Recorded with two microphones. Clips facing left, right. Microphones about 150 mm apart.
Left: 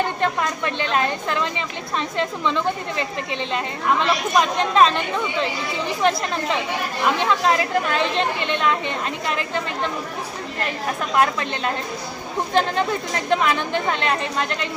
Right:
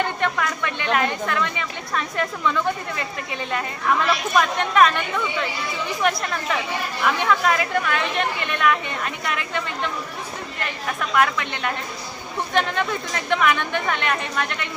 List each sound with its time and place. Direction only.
0.2 s a woman's voice: 30° left (ahead or behind)
11.1 s speech: 30° left (ahead or behind)